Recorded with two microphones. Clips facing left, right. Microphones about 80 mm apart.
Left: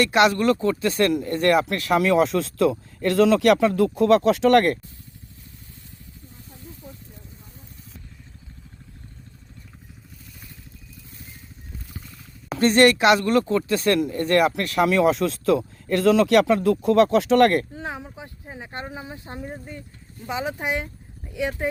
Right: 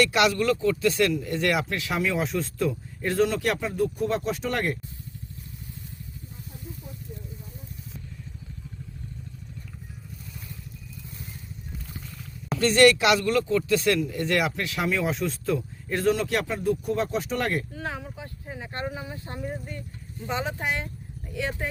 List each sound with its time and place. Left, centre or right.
0.0 s speech: left
12.5 s speech: left
17.7 s speech: left